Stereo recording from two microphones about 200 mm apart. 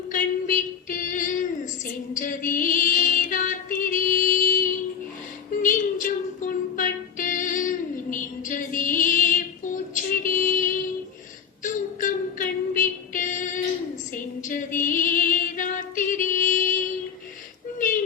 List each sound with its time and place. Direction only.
0.1 s female singing: 40° left (ahead or behind)
1.8 s music: 40° left (ahead or behind)
14.1 s female singing: 40° left (ahead or behind)
17.7 s a sound: 40° left (ahead or behind)